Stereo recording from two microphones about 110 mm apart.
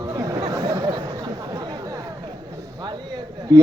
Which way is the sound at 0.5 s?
30° right (ahead or behind).